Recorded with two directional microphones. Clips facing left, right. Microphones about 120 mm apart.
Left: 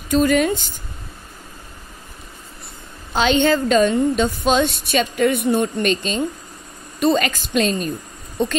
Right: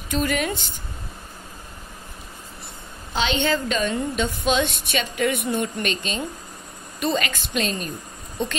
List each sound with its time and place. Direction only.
0.1 s a woman's voice: 40° left (ahead or behind)
3.2 s a woman's voice: 45° left (ahead or behind)